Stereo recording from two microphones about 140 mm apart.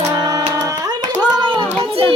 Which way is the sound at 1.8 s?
40° right (ahead or behind).